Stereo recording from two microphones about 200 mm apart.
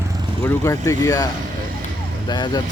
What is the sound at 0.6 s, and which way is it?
Speech, 15° left (ahead or behind).